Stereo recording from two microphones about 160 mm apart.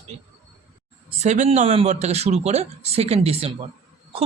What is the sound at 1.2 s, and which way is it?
A man's voice, 45° right (ahead or behind).